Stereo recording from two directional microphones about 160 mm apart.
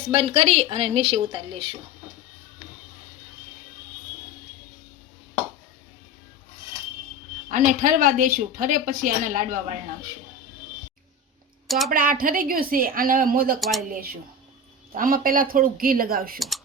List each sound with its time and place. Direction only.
0.1 s a woman's voice: 40° right (ahead or behind)
7.4 s a woman's voice: 55° right (ahead or behind)
11.9 s a woman's voice: 65° right (ahead or behind)
13.6 s speech: centre (ahead or behind)
13.9 s a woman's voice: 70° right (ahead or behind)